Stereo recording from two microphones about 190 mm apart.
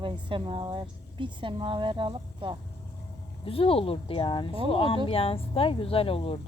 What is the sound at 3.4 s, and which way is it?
Speech, 30° left (ahead or behind).